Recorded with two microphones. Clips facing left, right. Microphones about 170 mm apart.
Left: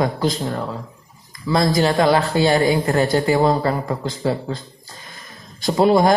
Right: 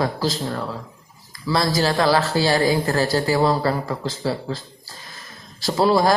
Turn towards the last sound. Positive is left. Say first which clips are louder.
# left 3 dB
turn(degrees=20)  # may be behind; listen again after turning